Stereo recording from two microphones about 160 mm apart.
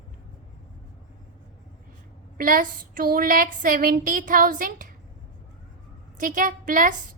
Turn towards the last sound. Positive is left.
turn(degrees=-55)  # may be behind; listen again after turning